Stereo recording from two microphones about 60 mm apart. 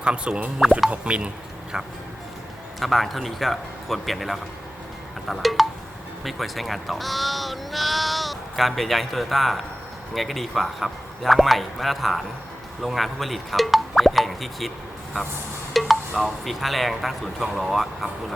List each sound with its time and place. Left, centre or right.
0.0 s speech: centre
2.8 s speech: centre
15.7 s speech: centre